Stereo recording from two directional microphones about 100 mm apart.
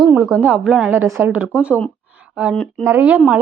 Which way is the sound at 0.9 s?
20° right (ahead or behind).